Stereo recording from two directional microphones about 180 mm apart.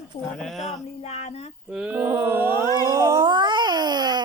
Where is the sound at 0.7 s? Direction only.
35° left (ahead or behind).